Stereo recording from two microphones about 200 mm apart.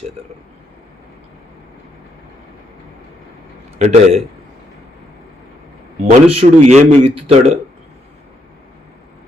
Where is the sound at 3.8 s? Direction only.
35° right (ahead or behind).